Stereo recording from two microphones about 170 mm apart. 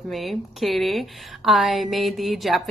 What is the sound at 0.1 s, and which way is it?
A woman's voice, centre (ahead or behind).